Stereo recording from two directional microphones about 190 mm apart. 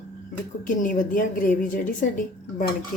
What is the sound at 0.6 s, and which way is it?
Speech, 45° left (ahead or behind).